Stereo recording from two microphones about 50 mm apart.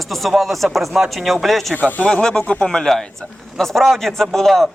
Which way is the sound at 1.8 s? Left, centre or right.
Left.